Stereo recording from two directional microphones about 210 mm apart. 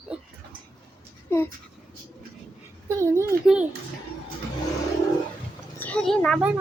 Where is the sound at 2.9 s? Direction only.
15° right (ahead or behind).